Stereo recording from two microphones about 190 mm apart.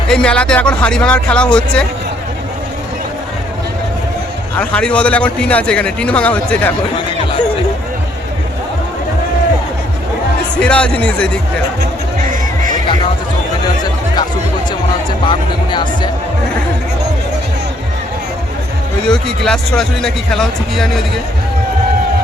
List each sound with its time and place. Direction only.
0.1 s speech: 5° left (ahead or behind)
4.5 s a man's voice: 5° left (ahead or behind)
10.6 s speech: 5° left (ahead or behind)
15.3 s speech: 25° left (ahead or behind)
19.0 s speech: 5° left (ahead or behind)